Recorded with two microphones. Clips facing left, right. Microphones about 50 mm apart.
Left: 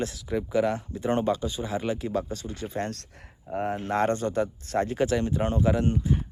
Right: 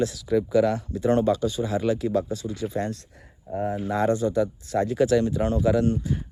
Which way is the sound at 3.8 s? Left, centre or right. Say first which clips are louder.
Right 3 dB; left.